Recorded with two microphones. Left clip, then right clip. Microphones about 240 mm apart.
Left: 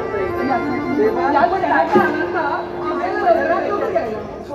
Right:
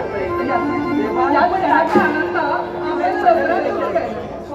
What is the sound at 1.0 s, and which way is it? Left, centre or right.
Chatter, right.